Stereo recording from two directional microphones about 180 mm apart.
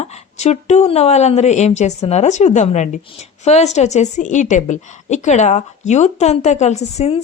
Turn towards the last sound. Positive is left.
turn(degrees=35)  # may be behind; listen again after turning